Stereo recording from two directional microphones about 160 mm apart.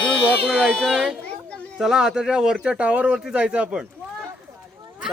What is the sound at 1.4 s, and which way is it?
Children playing, 5° left (ahead or behind).